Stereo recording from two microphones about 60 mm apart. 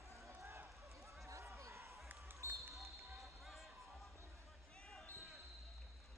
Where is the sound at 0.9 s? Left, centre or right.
Right.